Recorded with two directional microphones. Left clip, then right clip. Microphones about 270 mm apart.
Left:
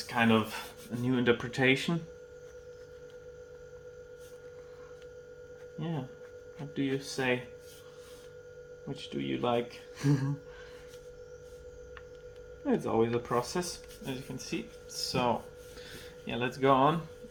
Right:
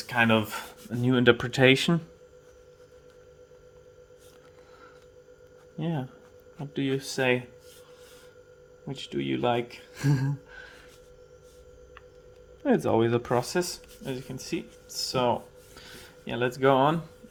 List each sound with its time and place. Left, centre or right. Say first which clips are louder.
0.0 s speech: right 4 dB; right
5.8 s speech: right 6 dB; right
8.9 s speech: right 5 dB; right
12.6 s speech: right 5 dB; right
14.0 s speech: right 4 dB; right